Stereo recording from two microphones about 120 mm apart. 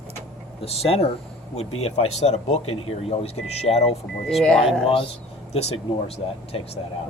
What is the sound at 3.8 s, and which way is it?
Speech, centre (ahead or behind).